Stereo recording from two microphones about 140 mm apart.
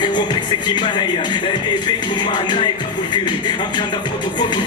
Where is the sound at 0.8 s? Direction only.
30° left (ahead or behind).